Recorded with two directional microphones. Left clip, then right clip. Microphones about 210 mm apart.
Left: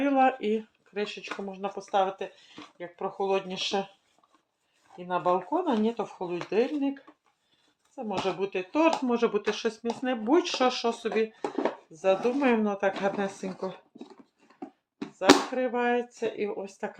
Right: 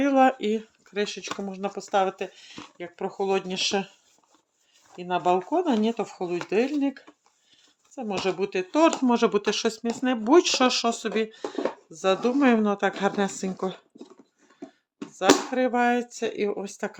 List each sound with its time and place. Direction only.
0.0 s speech: 45° right (ahead or behind)
4.9 s speech: 50° right (ahead or behind)
15.1 s speech: 55° right (ahead or behind)